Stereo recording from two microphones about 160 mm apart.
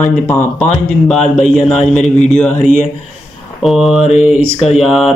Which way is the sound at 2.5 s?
50° left (ahead or behind).